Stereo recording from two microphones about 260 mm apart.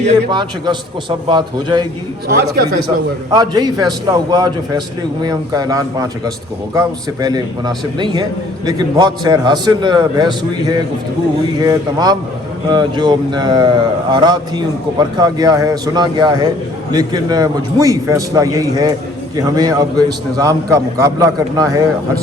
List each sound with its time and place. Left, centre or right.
0.3 s a man's voice: centre
2.2 s a man's voice: right
2.6 s a man's voice: centre